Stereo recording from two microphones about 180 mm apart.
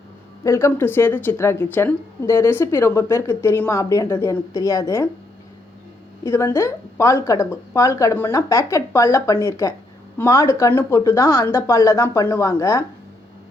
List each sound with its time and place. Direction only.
0.4 s speech: 15° left (ahead or behind)
6.2 s speech: 15° left (ahead or behind)